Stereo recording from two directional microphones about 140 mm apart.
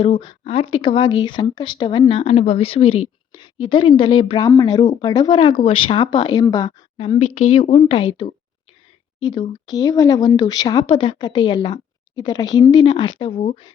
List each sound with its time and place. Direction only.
0.0 s speech: 35° left (ahead or behind)
6.9 s speech: 40° left (ahead or behind)